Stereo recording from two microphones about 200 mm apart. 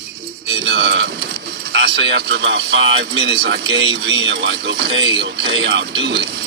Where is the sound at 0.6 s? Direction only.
55° right (ahead or behind).